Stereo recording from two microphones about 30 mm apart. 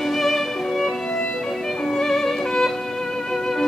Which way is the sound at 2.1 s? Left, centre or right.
Centre.